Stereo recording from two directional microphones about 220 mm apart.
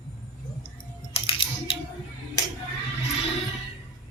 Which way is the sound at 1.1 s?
25° left (ahead or behind).